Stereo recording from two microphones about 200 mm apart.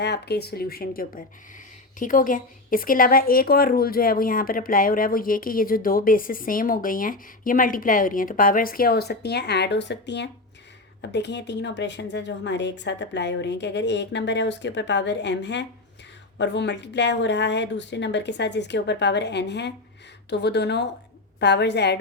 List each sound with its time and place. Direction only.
0.0 s a woman's voice: 55° left (ahead or behind)